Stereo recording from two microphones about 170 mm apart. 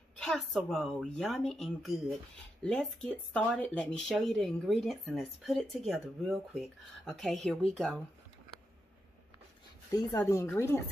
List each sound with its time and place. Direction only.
0.2 s a woman's voice: 5° left (ahead or behind)
9.8 s speech: 20° left (ahead or behind)